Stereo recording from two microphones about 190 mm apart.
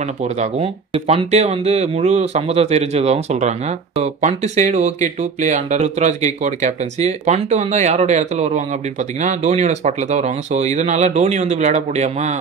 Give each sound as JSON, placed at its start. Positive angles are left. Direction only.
{"t": 0.2, "sound": "speech", "side_deg": -35}